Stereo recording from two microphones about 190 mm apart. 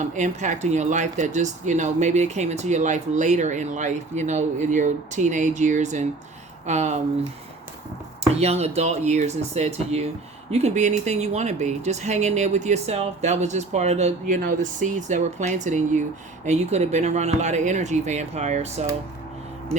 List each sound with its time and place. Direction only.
0.0 s speech: 40° right (ahead or behind)
8.4 s speech: 35° right (ahead or behind)